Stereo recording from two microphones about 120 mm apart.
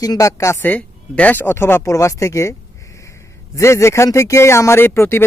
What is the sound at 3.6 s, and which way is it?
Speech, 25° left (ahead or behind).